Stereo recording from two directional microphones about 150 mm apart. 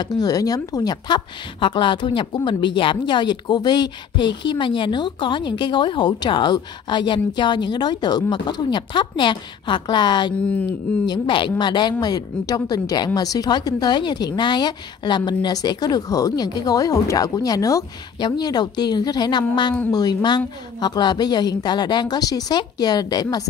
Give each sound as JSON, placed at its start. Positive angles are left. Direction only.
{"t": 0.0, "sound": "a woman's voice", "side_deg": 25}